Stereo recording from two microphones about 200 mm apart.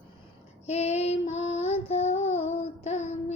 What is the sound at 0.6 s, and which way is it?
Female singing, 30° left (ahead or behind).